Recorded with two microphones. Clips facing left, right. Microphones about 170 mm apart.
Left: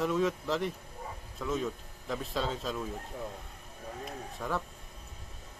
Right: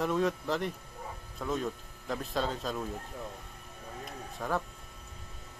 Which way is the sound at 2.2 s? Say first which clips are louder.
Right 1 dB; centre (ahead or behind).